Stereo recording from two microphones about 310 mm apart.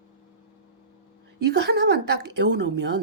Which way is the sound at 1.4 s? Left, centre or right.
Right.